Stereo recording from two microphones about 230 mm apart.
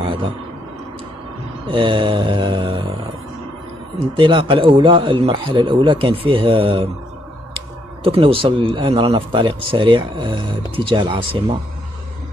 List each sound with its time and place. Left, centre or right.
0.0 s a sound: right
1.7 s speech: right
4.2 s speech: right